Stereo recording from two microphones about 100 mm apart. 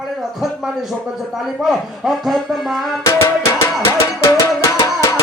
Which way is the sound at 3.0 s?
30° left (ahead or behind).